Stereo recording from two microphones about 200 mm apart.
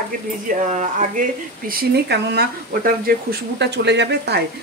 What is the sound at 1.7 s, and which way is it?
Speech, 50° right (ahead or behind).